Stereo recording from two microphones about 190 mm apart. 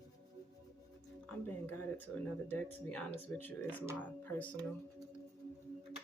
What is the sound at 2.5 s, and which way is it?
Speech, 10° left (ahead or behind).